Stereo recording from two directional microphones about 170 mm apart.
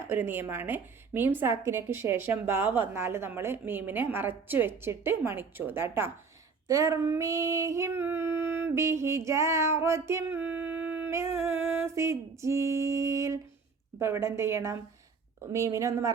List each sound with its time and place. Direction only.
0.0 s female singing: 10° right (ahead or behind)
15.5 s speech: 20° right (ahead or behind)